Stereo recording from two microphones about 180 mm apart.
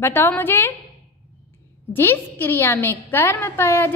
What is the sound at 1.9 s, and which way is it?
A woman's voice, 10° left (ahead or behind).